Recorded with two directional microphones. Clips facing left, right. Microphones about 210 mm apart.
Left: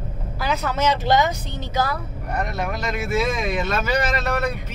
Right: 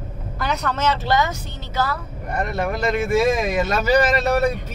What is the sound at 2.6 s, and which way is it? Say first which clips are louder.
Speech: right 5 dB; 50° right (ahead or behind).